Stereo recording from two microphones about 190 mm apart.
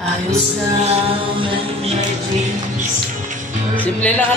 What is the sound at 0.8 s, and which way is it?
Chant, 30° right (ahead or behind).